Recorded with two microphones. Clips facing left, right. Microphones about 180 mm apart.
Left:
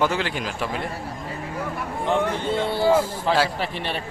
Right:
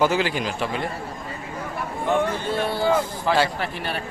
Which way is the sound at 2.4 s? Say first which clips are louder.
Left 1 dB; 25° left (ahead or behind).